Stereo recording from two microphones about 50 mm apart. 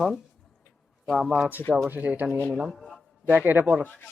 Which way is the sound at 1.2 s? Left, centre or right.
Centre.